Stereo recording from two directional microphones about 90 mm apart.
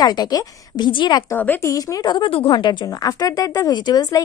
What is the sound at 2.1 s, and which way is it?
A woman's voice, 70° left (ahead or behind).